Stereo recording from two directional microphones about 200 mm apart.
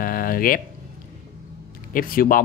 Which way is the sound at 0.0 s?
45° left (ahead or behind).